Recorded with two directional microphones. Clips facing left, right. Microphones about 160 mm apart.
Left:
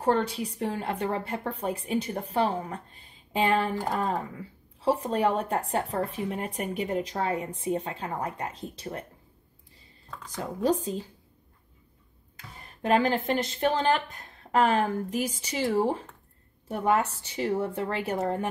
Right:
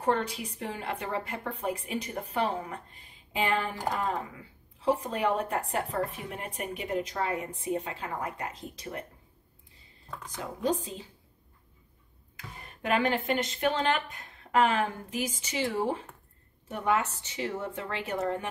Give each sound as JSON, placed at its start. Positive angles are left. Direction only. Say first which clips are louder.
{"t": 0.0, "sound": "speech", "louder": "left 3 dB", "side_deg": 35}
{"t": 10.6, "sound": "speech", "louder": "left 4 dB", "side_deg": 40}
{"t": 12.8, "sound": "speech", "louder": "left 3 dB", "side_deg": 35}